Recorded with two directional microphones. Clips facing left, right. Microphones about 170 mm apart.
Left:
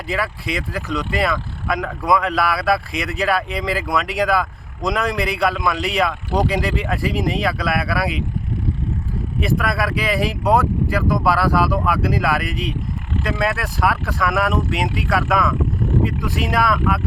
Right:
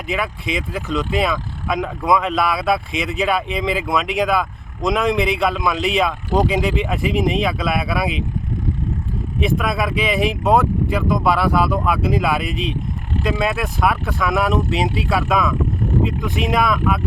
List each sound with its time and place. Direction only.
0.1 s speech: 20° right (ahead or behind)
9.4 s speech: 20° right (ahead or behind)